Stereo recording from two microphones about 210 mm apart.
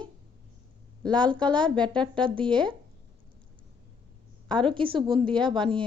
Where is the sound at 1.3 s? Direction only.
20° right (ahead or behind).